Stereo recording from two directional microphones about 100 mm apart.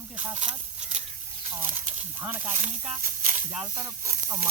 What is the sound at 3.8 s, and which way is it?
Speech, 30° right (ahead or behind).